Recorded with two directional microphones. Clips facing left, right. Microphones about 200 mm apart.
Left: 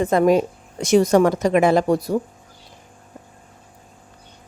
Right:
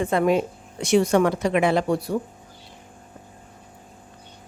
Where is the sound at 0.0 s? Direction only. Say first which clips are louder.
Left 4 dB; 40° left (ahead or behind).